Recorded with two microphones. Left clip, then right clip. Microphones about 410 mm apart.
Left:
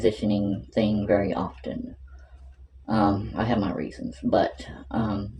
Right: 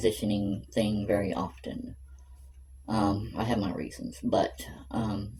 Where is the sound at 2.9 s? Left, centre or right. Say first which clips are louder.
Left 5 dB; right.